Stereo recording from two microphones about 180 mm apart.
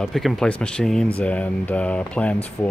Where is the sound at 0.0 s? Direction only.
Centre (ahead or behind).